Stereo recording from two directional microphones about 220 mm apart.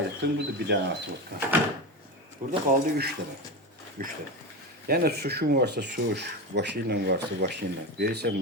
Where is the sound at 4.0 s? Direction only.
40° right (ahead or behind).